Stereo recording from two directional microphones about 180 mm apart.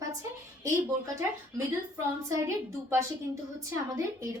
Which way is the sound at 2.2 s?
15° right (ahead or behind).